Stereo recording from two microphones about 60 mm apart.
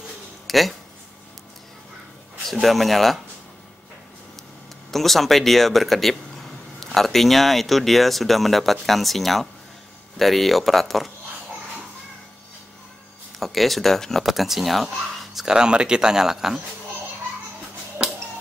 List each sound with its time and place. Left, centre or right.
0.5 s speech: centre
2.4 s speech: centre
4.9 s speech: centre
13.4 s speech: centre
18.0 s music: centre